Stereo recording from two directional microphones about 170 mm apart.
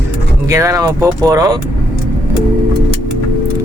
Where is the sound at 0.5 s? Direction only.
20° right (ahead or behind).